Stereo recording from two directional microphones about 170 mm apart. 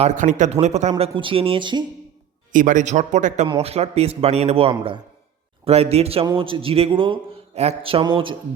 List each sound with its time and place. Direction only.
0.0 s a man's voice: 50° right (ahead or behind); by 1.8 s 30° right (ahead or behind)
2.5 s a man's voice: 50° right (ahead or behind); by 8.4 s 30° right (ahead or behind)